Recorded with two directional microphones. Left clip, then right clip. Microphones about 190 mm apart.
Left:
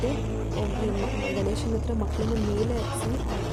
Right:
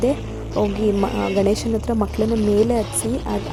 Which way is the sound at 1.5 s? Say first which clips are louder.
Right 8 dB; 40° right (ahead or behind).